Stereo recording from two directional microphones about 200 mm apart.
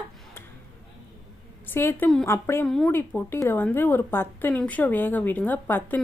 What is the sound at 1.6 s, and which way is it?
A woman's voice, 10° left (ahead or behind).